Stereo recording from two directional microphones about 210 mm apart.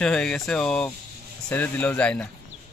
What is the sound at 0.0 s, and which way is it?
A man's voice, 5° left (ahead or behind).